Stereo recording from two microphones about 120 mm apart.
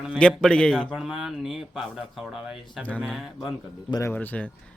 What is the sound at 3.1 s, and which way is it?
Speech, centre (ahead or behind).